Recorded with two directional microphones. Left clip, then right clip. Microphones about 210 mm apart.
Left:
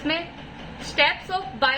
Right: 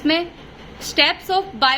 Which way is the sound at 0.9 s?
55° right (ahead or behind).